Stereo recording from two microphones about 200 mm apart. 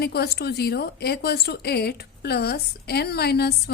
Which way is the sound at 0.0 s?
55° left (ahead or behind).